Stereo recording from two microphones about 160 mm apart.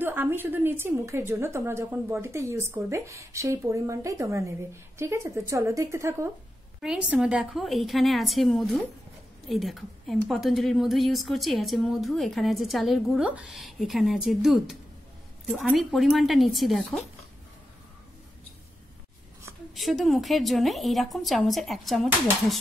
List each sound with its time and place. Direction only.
0.0 s a woman's voice: 15° right (ahead or behind)
6.8 s a woman's voice: 5° right (ahead or behind)
19.7 s a woman's voice: centre (ahead or behind)